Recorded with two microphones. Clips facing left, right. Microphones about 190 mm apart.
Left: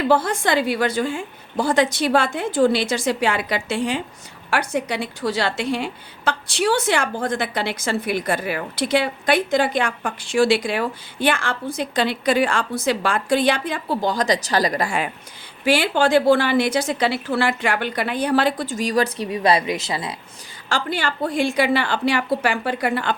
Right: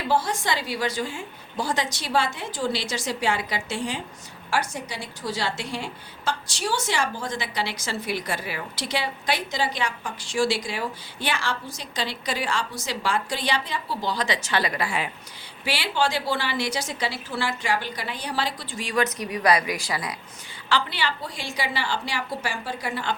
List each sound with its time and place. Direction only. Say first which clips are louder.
0.1 s a woman's voice: left 3 dB; 55° left (ahead or behind); by 20.1 s 25° left (ahead or behind)
20.7 s a woman's voice: left 2 dB; 45° left (ahead or behind); by 23.1 s 60° left (ahead or behind)